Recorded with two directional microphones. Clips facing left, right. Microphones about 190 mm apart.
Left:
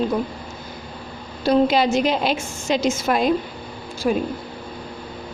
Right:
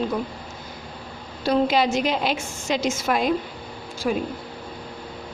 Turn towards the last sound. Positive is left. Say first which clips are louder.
# left 3 dB
turn(degrees=30)  # may be behind; listen again after turning